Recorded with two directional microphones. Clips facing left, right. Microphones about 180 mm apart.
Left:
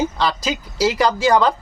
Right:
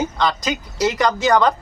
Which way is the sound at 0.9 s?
30° left (ahead or behind).